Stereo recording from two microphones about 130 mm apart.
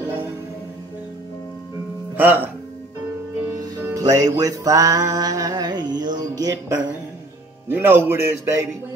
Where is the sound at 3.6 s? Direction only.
30° right (ahead or behind).